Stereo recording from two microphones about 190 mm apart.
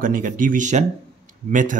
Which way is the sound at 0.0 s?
45° right (ahead or behind).